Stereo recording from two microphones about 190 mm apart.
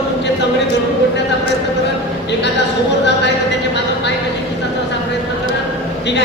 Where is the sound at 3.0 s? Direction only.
65° left (ahead or behind).